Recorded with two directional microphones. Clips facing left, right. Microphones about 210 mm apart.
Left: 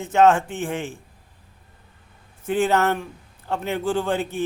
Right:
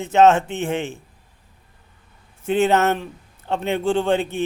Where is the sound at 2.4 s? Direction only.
25° right (ahead or behind).